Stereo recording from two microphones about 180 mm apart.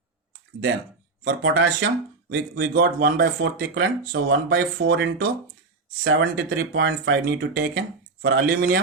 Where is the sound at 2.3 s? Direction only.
60° right (ahead or behind).